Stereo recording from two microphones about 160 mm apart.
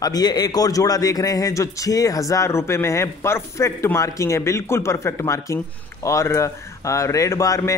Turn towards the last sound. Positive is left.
turn(degrees=20)  # may be behind; listen again after turning